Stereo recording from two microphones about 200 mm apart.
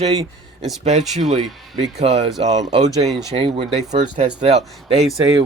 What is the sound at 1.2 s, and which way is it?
Speech, 35° right (ahead or behind).